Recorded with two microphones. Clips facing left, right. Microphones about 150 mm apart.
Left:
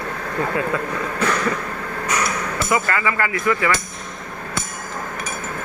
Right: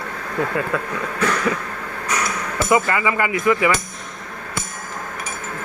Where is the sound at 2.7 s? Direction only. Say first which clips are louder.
Right 3 dB; 20° right (ahead or behind).